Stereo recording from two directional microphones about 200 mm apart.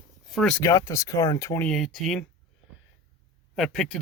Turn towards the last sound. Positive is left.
turn(degrees=0)  # may be behind; listen again after turning